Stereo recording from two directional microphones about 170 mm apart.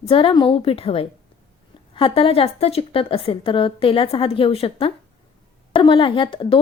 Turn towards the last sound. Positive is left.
turn(degrees=30)  # may be behind; listen again after turning